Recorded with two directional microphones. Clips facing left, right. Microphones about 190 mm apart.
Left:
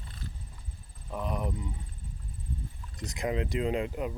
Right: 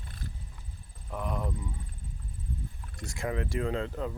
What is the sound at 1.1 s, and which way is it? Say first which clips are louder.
Speech: left 1 dB; 20° left (ahead or behind).